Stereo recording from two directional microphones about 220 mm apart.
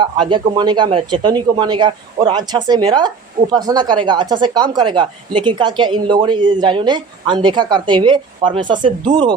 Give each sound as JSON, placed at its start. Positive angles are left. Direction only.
{"t": 0.0, "sound": "a man's voice", "side_deg": -20}